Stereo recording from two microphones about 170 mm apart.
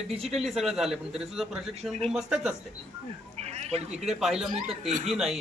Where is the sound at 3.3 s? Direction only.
40° right (ahead or behind).